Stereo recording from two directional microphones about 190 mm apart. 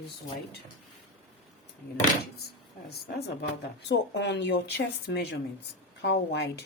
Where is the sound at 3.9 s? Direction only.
65° left (ahead or behind).